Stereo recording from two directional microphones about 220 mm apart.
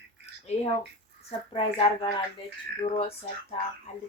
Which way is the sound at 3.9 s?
30° left (ahead or behind).